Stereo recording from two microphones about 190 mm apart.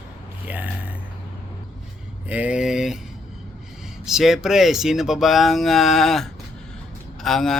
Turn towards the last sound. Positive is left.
turn(degrees=0)  # may be behind; listen again after turning